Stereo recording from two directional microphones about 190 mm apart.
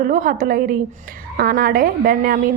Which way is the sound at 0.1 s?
45° right (ahead or behind).